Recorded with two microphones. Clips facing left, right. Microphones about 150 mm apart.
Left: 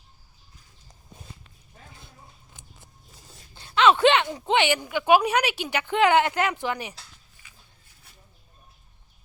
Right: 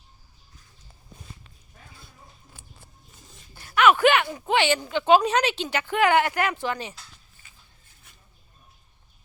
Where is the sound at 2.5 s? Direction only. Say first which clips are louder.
Right 1 dB; 15° left (ahead or behind).